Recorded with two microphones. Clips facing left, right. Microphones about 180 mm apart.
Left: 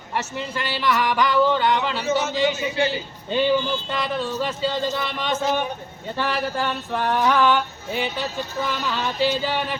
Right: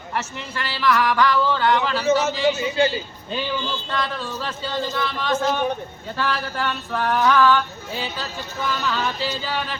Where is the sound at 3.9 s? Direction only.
20° left (ahead or behind).